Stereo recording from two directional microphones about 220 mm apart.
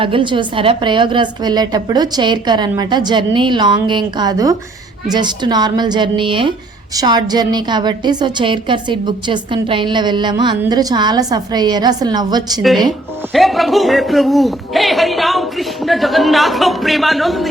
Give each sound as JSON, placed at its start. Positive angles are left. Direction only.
{"t": 0.0, "sound": "a woman's voice", "side_deg": -20}
{"t": 13.3, "sound": "a man's voice", "side_deg": 0}